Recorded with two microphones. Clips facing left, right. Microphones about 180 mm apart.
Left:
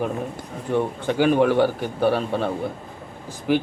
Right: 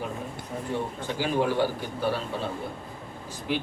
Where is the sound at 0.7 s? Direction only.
65° left (ahead or behind).